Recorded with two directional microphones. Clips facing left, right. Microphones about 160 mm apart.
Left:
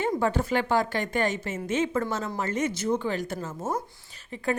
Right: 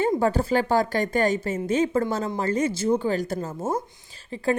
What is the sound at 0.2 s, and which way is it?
A woman's voice, 35° right (ahead or behind).